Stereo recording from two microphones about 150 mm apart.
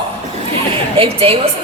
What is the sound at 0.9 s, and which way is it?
Speech, 40° right (ahead or behind).